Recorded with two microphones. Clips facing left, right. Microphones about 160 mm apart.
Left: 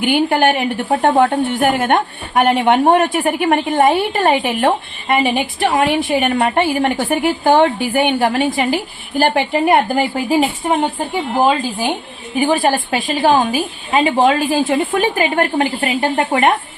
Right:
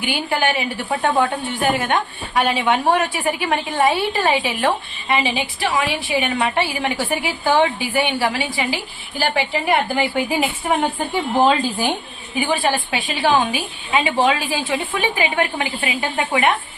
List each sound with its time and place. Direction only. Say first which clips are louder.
0.0 s speech: left 7 dB; 55° left (ahead or behind); by 10.4 s 40° left (ahead or behind)
12.4 s speech: left 5 dB; 40° left (ahead or behind)